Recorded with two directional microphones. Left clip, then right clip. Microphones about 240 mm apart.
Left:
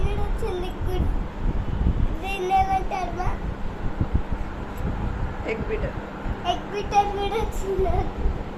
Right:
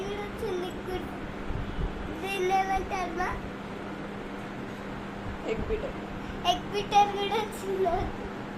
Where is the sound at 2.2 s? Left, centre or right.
Centre.